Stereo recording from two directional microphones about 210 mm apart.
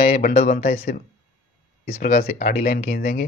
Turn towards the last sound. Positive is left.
turn(degrees=45)  # may be behind; listen again after turning